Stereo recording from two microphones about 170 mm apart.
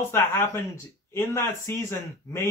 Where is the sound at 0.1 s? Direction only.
15° left (ahead or behind).